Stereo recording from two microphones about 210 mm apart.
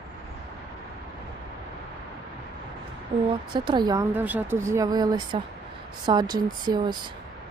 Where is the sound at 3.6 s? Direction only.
20° right (ahead or behind).